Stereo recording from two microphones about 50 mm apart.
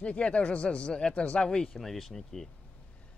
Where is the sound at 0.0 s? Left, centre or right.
Left.